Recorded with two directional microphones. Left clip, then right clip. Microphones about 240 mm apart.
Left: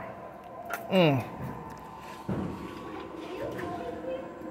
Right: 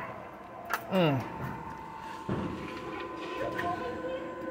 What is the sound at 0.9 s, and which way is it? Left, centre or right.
Music, centre.